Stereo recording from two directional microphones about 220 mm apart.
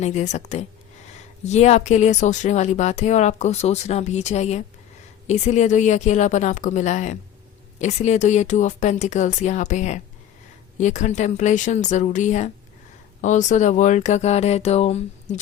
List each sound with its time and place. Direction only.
0.0 s speech: 30° left (ahead or behind)